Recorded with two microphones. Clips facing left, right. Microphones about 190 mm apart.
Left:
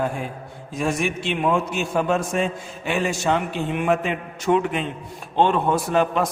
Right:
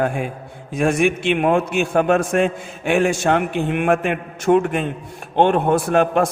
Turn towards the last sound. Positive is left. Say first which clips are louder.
# right 4 dB
turn(degrees=-55)  # may be behind; listen again after turning